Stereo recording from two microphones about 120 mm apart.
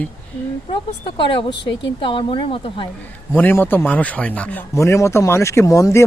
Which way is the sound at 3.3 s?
15° left (ahead or behind).